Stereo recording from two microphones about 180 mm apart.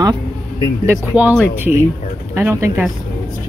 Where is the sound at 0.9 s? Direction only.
10° right (ahead or behind).